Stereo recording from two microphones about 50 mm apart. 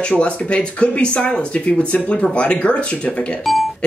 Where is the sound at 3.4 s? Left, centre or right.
Centre.